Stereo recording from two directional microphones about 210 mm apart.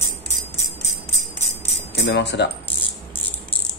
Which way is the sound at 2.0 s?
55° left (ahead or behind).